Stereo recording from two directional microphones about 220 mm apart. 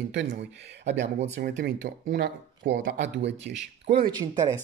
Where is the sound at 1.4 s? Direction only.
45° right (ahead or behind).